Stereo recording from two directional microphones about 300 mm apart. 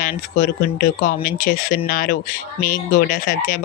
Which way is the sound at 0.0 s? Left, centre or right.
Left.